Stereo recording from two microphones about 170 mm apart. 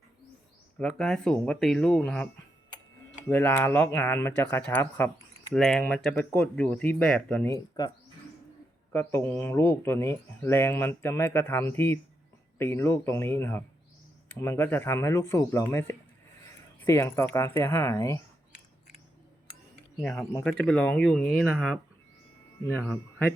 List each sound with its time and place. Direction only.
0.8 s speech: 5° left (ahead or behind)
8.9 s speech: 15° left (ahead or behind)
20.4 s speech: 5° left (ahead or behind)
22.9 s speech: 5° left (ahead or behind)